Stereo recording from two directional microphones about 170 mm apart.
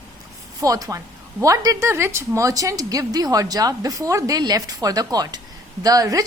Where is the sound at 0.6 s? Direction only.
20° right (ahead or behind).